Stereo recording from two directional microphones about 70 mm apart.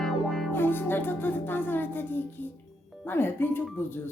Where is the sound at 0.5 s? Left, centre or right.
Left.